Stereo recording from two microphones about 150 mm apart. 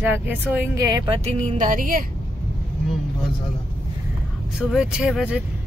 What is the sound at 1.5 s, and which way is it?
Speech, 60° right (ahead or behind).